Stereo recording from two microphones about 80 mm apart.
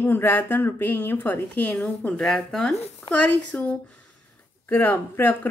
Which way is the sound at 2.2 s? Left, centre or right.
Centre.